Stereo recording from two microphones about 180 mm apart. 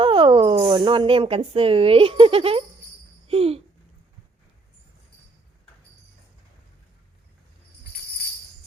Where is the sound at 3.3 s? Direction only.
35° right (ahead or behind).